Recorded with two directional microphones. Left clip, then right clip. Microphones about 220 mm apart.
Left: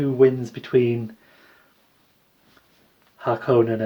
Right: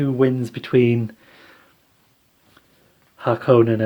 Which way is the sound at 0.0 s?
45° right (ahead or behind).